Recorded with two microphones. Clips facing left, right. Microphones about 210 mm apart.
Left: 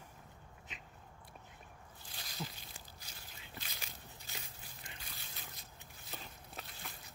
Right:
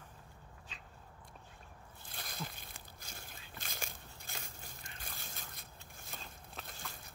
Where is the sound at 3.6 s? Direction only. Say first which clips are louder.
Right 4 dB; 50° right (ahead or behind).